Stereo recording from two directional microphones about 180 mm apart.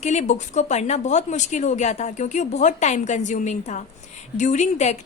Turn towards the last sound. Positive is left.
turn(degrees=40)  # may be behind; listen again after turning